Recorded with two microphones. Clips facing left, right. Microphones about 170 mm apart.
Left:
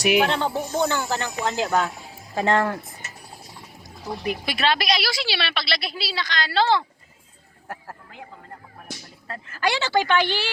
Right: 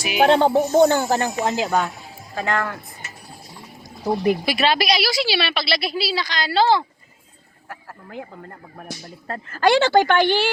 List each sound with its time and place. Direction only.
0.3 s speech: 50° right (ahead or behind)
1.5 s speech: 5° right (ahead or behind)
2.3 s speech: 30° left (ahead or behind)
4.0 s speech: 50° right (ahead or behind)
4.4 s a woman's voice: 10° right (ahead or behind)
9.2 s speech: 50° right (ahead or behind)